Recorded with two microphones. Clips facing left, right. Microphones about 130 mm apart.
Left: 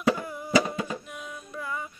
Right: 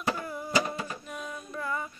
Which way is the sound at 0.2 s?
10° left (ahead or behind).